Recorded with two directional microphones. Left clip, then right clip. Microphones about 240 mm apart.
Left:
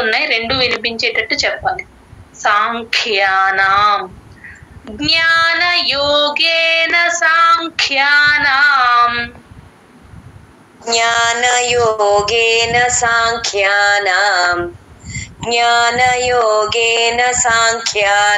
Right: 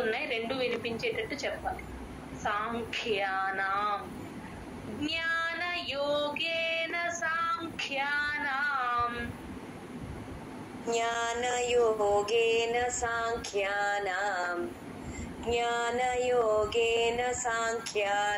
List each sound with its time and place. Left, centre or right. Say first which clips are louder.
0.0 s female singing: left 17 dB; left
5.0 s female singing: left 19 dB; left
10.9 s female singing: left 17 dB; left